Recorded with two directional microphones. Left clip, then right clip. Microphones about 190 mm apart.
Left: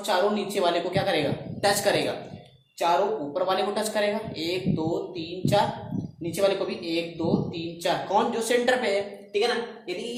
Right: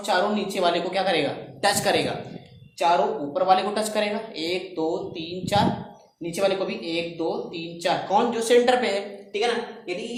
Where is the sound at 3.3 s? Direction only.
25° right (ahead or behind).